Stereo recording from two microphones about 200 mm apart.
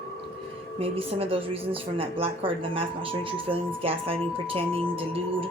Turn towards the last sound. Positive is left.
turn(degrees=-25)  # may be behind; listen again after turning